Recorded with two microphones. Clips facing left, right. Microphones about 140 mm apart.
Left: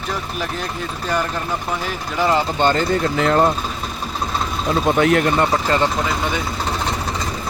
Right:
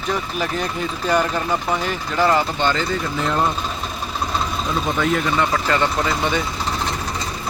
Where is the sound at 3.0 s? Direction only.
80° left.